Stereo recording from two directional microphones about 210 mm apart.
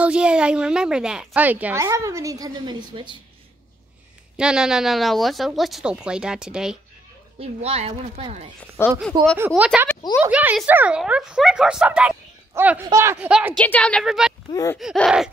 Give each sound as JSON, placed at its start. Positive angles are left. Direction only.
{"t": 0.0, "sound": "a woman's voice", "side_deg": -5}
{"t": 4.4, "sound": "speech", "side_deg": -5}
{"t": 7.3, "sound": "a woman's voice", "side_deg": -30}
{"t": 8.8, "sound": "speech", "side_deg": 10}
{"t": 9.1, "sound": "a woman's voice", "side_deg": -20}
{"t": 9.5, "sound": "speech", "side_deg": -5}
{"t": 13.6, "sound": "speech", "side_deg": 5}
{"t": 14.5, "sound": "speech", "side_deg": 15}
{"t": 14.8, "sound": "speech", "side_deg": 0}